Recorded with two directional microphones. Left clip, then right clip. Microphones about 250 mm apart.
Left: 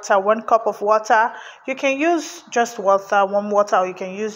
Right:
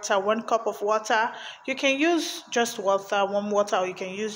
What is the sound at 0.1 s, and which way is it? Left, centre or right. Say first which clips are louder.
Speech: left 8 dB; centre.